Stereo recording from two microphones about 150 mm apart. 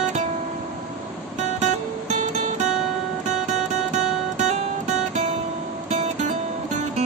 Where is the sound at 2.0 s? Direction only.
55° right (ahead or behind).